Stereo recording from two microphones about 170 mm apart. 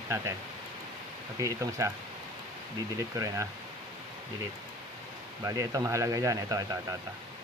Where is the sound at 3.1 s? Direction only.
20° right (ahead or behind).